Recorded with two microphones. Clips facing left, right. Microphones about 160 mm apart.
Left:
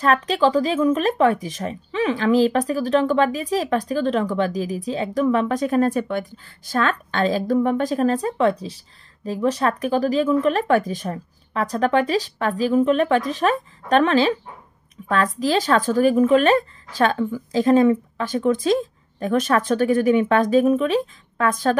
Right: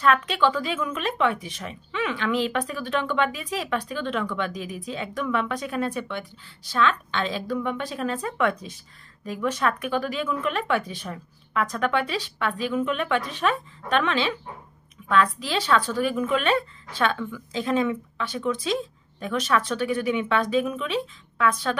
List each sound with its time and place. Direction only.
0.0 s a woman's voice: 35° left (ahead or behind)